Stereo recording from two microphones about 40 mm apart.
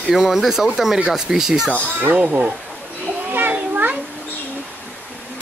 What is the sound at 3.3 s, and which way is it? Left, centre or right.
Children playing, right.